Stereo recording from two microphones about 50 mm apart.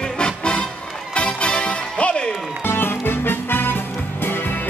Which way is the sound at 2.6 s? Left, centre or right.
Left.